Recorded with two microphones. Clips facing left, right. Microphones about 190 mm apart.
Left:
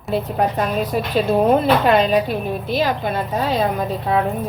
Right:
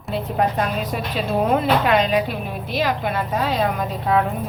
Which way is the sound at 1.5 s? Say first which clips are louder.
Left 1 dB; 35° left (ahead or behind).